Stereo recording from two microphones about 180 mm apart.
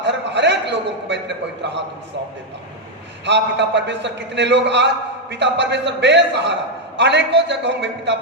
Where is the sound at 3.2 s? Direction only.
75° right (ahead or behind).